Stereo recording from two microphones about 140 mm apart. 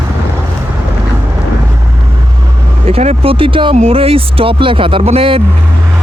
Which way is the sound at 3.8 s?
45° right (ahead or behind).